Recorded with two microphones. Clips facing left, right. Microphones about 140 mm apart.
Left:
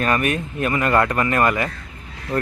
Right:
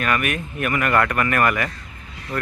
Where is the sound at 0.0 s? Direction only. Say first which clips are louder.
Left 3 dB; 30° left (ahead or behind).